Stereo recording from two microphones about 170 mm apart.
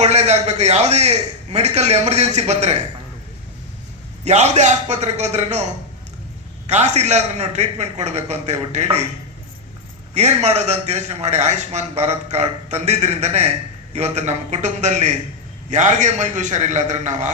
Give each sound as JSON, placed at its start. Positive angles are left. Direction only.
{"t": 0.0, "sound": "a man's voice", "side_deg": -40}
{"t": 4.2, "sound": "a man's voice", "side_deg": -40}
{"t": 10.2, "sound": "a man's voice", "side_deg": -40}